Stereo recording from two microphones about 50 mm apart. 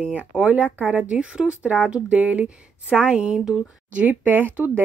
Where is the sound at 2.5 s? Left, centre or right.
Right.